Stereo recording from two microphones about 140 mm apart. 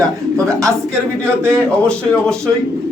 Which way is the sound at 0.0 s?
25° right (ahead or behind).